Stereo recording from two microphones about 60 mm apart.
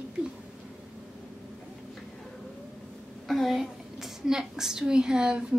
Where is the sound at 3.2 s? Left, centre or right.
Centre.